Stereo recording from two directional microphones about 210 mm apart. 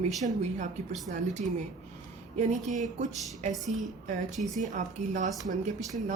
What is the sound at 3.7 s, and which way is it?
Speech, 35° right (ahead or behind).